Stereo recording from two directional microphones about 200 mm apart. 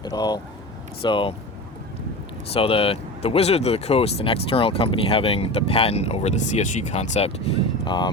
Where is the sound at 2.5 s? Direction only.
30° left (ahead or behind).